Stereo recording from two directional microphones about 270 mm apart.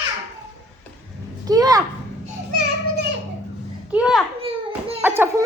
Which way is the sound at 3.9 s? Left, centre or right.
Centre.